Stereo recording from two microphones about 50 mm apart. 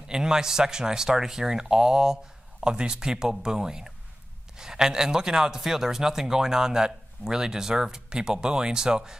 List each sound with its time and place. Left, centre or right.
0.1 s speech: centre